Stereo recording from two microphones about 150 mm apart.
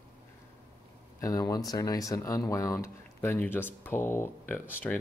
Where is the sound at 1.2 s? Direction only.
25° left (ahead or behind).